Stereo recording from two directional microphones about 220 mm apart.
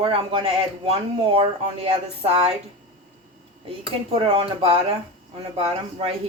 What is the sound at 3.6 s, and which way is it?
Speech, 25° right (ahead or behind).